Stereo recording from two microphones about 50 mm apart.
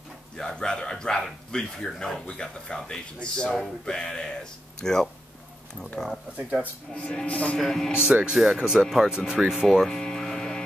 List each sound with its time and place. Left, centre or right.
0.4 s speech: centre
7.5 s speech: centre
8.0 s speech: centre
9.8 s a sound: centre